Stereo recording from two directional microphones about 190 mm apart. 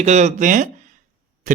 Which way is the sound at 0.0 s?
35° right (ahead or behind).